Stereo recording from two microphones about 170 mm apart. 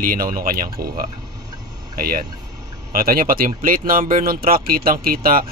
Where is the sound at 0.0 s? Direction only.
55° right (ahead or behind).